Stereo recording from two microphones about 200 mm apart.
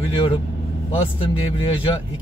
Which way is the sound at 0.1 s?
25° left (ahead or behind).